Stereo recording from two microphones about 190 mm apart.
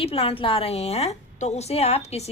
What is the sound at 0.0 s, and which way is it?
A woman's voice, 30° left (ahead or behind).